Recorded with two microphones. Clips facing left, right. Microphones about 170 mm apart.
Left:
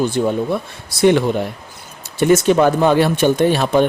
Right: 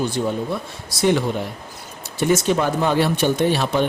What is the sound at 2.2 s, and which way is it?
A man's voice, 60° left (ahead or behind).